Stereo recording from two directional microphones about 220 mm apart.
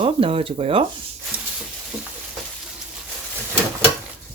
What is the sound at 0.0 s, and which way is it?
Speech, 25° right (ahead or behind).